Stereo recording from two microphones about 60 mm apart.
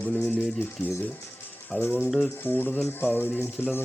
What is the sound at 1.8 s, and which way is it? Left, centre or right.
Speech, left.